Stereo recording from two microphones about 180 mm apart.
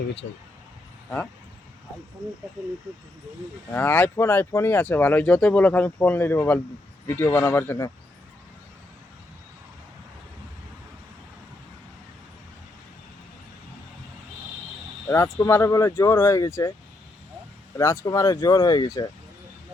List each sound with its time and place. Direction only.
3.7 s speech: 10° left (ahead or behind)
15.0 s speech: 15° left (ahead or behind)
17.7 s speech: 15° left (ahead or behind)